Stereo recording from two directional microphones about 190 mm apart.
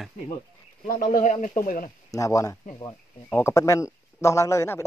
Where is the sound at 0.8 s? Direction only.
45° left (ahead or behind).